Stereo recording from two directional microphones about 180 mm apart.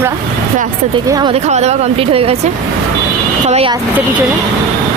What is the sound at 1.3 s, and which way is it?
Speech, 35° right (ahead or behind).